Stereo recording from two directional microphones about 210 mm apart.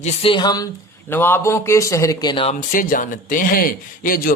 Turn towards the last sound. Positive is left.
turn(degrees=40)  # may be behind; listen again after turning